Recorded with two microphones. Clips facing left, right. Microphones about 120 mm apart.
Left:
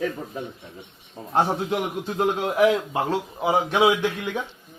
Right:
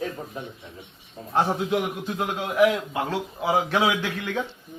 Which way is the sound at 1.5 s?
30° left (ahead or behind).